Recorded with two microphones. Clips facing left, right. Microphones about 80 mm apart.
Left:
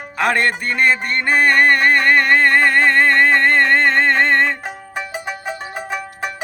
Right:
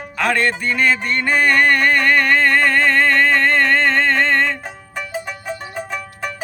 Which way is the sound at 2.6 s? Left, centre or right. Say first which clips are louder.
Left 1 dB; centre.